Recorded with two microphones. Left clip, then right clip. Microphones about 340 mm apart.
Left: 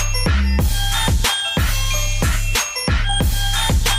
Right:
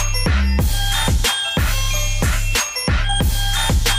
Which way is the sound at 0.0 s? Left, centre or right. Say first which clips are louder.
Even; centre.